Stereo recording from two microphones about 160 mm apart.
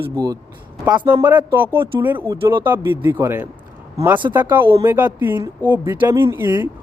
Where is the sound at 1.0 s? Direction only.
15° right (ahead or behind).